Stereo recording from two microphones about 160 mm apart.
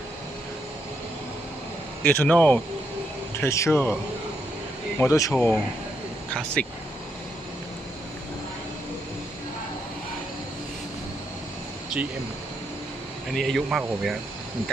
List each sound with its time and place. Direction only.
2.0 s a man's voice: 10° left (ahead or behind)
4.9 s a man's voice: 20° left (ahead or behind)
13.3 s speech: centre (ahead or behind)